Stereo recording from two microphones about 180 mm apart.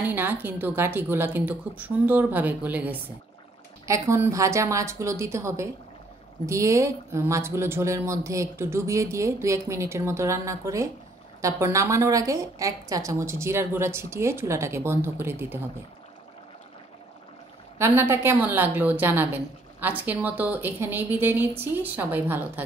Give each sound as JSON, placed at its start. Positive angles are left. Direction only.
{"t": 0.0, "sound": "a woman's voice", "side_deg": -10}
{"t": 17.7, "sound": "a woman's voice", "side_deg": -15}